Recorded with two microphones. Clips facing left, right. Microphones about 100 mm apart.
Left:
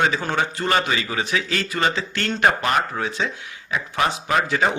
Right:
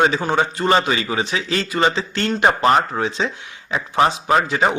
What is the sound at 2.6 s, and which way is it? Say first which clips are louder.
A man's voice: right 6 dB; 35° right (ahead or behind).